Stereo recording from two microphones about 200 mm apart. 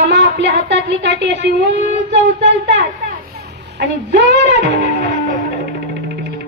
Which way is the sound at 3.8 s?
60° right (ahead or behind).